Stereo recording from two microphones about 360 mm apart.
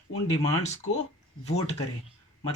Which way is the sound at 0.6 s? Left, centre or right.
Centre.